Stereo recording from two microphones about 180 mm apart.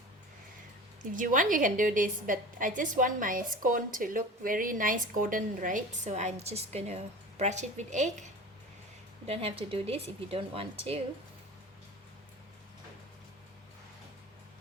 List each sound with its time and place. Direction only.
1.1 s a woman's voice: 45° right (ahead or behind)